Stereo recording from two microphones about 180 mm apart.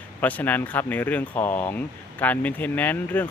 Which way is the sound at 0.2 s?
10° left (ahead or behind).